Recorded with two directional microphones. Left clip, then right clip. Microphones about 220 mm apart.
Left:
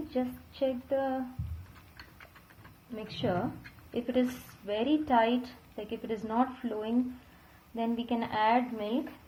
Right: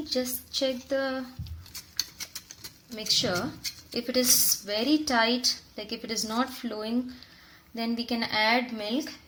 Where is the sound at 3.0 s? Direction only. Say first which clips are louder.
Right 7 dB; 30° right (ahead or behind).